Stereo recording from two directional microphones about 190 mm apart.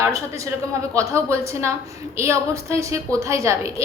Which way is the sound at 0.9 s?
15° right (ahead or behind).